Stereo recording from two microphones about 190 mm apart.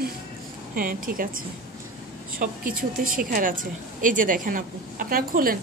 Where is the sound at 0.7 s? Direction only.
50° right (ahead or behind).